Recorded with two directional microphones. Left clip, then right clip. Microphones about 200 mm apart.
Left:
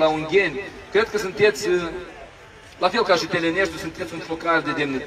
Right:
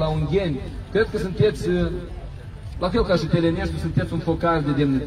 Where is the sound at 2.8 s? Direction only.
45° left (ahead or behind).